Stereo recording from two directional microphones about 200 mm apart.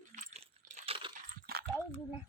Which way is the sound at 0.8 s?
30° right (ahead or behind).